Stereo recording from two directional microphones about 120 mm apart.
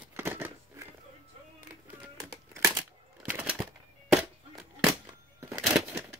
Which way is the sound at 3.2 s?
15° right (ahead or behind).